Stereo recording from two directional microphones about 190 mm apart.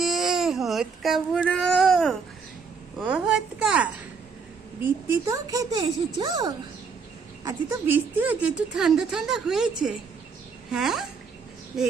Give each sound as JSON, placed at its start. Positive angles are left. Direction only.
{"t": 0.0, "sound": "speech", "side_deg": 0}
{"t": 7.4, "sound": "speech", "side_deg": -10}